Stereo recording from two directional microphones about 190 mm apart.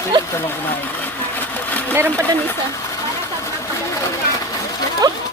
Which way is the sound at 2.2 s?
10° left (ahead or behind).